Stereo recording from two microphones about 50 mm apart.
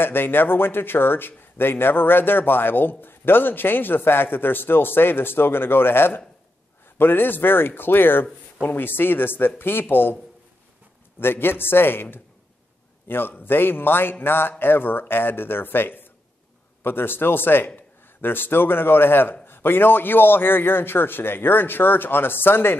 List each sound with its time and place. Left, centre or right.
0.0 s a man's voice: left
11.1 s a man's voice: left